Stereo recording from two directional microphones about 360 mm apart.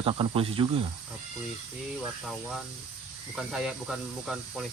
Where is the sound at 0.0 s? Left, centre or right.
Centre.